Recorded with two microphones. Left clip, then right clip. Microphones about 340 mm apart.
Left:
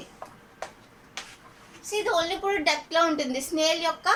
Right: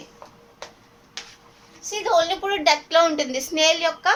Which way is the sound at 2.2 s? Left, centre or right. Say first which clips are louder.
Right 5 dB; right.